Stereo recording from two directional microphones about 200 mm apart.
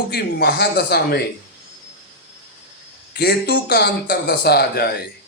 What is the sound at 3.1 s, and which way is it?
A man's voice, 55° left (ahead or behind).